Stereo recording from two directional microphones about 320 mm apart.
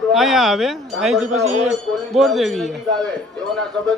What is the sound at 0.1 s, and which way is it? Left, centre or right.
Speech, centre.